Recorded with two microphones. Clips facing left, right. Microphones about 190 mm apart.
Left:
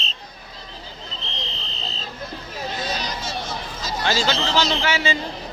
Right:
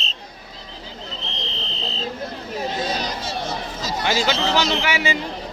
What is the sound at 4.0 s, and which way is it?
A man's voice, 15° right (ahead or behind).